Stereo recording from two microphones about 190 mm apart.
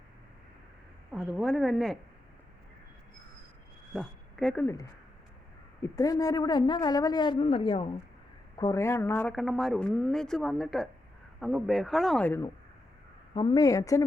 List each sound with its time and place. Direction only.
1.1 s speech: centre (ahead or behind)
3.9 s a woman's voice: centre (ahead or behind)
9.2 s speech: centre (ahead or behind)
13.3 s speech: 25° left (ahead or behind)